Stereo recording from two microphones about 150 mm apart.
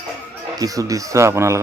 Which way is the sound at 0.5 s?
25° right (ahead or behind).